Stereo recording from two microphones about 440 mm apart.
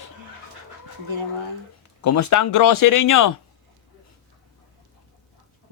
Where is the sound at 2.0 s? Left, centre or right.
Left.